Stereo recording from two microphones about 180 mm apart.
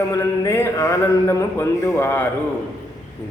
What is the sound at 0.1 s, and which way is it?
A man's voice, 15° left (ahead or behind).